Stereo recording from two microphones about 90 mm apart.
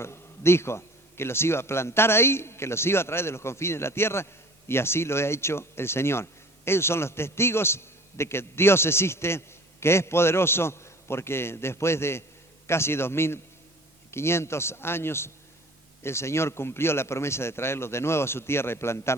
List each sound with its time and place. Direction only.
0.0 s a man's voice: 30° left (ahead or behind)